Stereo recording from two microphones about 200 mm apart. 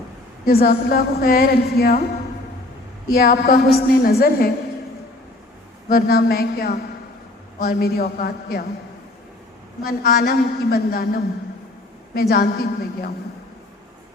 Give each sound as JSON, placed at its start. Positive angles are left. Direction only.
{"t": 0.4, "sound": "a woman's voice", "side_deg": 50}
{"t": 3.1, "sound": "a woman's voice", "side_deg": 50}
{"t": 5.9, "sound": "a woman's voice", "side_deg": 50}
{"t": 9.8, "sound": "a woman's voice", "side_deg": 50}
{"t": 12.3, "sound": "a woman's voice", "side_deg": 50}